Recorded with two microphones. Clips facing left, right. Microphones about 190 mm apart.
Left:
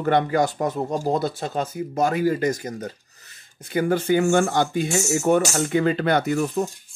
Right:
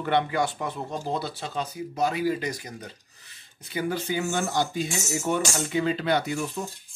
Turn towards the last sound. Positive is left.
turn(degrees=45)  # may be behind; listen again after turning